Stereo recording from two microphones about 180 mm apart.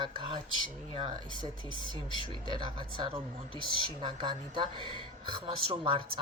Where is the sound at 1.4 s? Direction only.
25° left (ahead or behind).